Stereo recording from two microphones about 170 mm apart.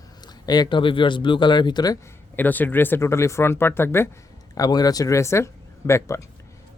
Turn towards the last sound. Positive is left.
turn(degrees=15)  # may be behind; listen again after turning